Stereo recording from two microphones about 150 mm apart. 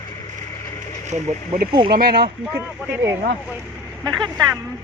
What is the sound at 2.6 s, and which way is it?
Speech, 15° right (ahead or behind).